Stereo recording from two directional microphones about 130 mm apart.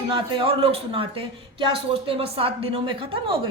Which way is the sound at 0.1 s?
45° right (ahead or behind).